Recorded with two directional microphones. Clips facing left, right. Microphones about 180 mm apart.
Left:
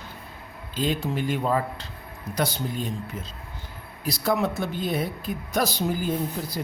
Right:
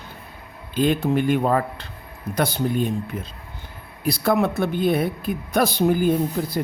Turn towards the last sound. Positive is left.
turn(degrees=-60)  # may be behind; listen again after turning